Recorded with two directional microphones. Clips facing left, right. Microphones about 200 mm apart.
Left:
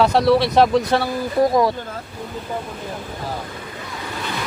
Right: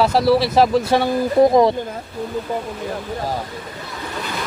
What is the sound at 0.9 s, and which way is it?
Speech, 20° right (ahead or behind).